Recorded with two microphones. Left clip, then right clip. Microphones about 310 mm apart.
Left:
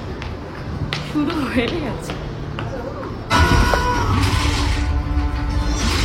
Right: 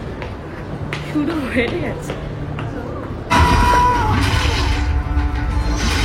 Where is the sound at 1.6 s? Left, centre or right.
Centre.